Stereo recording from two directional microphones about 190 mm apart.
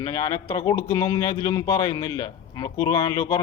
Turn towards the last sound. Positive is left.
turn(degrees=20)  # may be behind; listen again after turning